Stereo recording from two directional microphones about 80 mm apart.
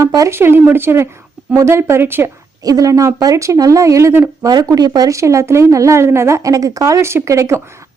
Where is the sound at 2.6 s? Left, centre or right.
Right.